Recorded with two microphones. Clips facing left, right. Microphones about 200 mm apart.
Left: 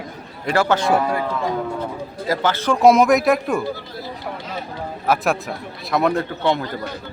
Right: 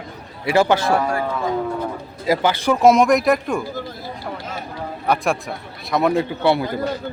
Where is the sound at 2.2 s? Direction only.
15° right (ahead or behind).